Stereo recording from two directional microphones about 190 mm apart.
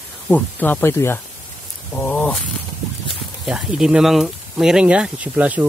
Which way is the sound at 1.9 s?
10° left (ahead or behind).